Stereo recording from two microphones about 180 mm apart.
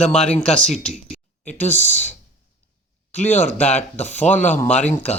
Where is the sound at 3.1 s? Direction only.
40° left (ahead or behind).